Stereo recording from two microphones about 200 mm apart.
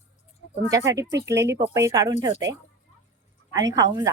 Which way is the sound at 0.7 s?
15° right (ahead or behind).